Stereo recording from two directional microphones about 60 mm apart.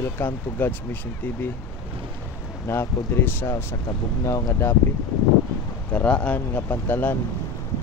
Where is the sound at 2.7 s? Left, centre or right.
Left.